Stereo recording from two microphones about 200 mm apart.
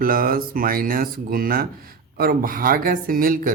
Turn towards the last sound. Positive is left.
turn(degrees=-45)  # may be behind; listen again after turning